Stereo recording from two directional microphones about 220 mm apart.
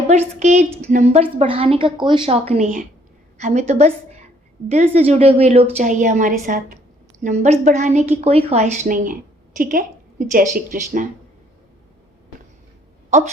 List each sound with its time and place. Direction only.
0.1 s a woman's voice: 30° right (ahead or behind)